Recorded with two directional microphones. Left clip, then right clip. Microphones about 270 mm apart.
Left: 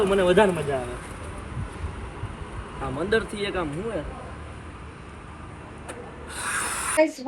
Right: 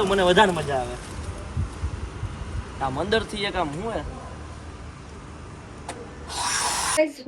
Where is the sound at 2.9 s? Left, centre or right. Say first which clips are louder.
Left 1 dB; right.